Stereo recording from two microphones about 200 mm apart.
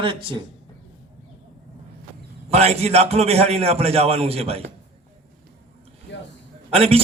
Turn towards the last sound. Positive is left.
turn(degrees=-30)  # may be behind; listen again after turning